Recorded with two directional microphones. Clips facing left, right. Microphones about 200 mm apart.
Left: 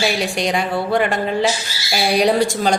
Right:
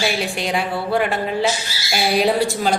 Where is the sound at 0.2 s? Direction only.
5° right (ahead or behind).